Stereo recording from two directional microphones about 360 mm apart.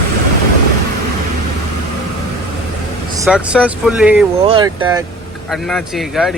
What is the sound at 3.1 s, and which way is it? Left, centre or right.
Speech, centre.